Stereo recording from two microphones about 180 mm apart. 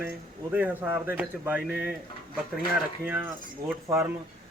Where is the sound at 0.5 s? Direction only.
10° right (ahead or behind).